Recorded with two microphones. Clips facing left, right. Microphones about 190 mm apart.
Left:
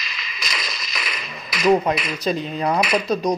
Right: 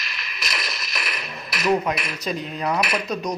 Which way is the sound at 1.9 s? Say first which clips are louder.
Left 4 dB; 30° left (ahead or behind).